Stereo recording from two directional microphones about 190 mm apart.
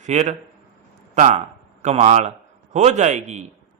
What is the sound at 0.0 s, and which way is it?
Speech, 40° right (ahead or behind).